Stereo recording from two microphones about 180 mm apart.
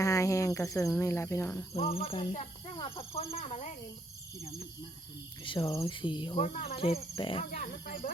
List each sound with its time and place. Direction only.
0.0 s cricket: 15° left (ahead or behind)
1.7 s speech: 35° left (ahead or behind)
5.4 s speech: 25° left (ahead or behind)
6.3 s speech: 40° left (ahead or behind)
7.6 s speech: 50° left (ahead or behind)